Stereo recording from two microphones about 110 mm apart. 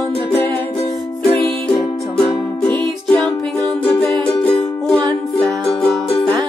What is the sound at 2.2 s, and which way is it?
Music, 10° left (ahead or behind).